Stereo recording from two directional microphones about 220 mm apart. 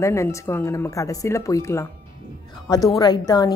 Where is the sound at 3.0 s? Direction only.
15° left (ahead or behind).